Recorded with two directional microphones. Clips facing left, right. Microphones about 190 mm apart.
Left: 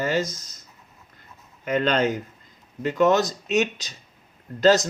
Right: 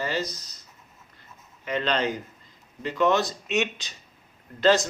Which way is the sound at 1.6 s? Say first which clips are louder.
Left 4 dB; 45° left (ahead or behind).